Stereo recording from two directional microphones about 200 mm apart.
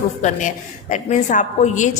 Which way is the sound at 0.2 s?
40° left (ahead or behind).